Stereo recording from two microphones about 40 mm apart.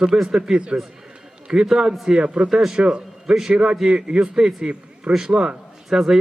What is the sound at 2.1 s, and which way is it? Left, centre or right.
Speech, right.